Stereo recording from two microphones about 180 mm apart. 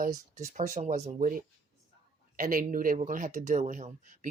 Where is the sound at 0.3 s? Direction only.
40° right (ahead or behind).